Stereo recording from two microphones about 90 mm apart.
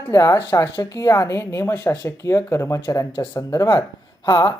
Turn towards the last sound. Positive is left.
turn(degrees=55)  # may be behind; listen again after turning